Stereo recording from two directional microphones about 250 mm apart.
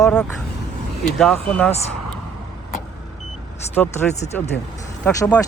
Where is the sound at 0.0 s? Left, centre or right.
Centre.